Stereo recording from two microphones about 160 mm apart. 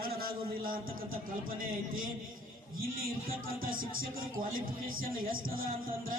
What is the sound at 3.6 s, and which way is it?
Speech, 60° right (ahead or behind).